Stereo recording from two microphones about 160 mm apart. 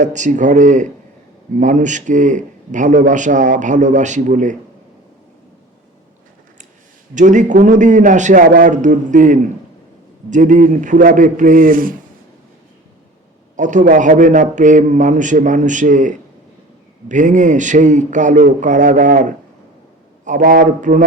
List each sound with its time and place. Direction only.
0.0 s a man's voice: 50° right (ahead or behind)
7.1 s a man's voice: 50° right (ahead or behind)
13.6 s a man's voice: 50° right (ahead or behind)